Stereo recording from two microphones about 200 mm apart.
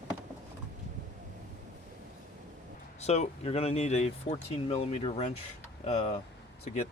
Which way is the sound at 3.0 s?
35° left (ahead or behind).